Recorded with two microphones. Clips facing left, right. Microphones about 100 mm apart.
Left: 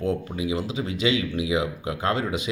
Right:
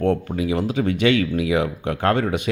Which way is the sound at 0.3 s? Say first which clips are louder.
Right 5 dB; 50° right (ahead or behind).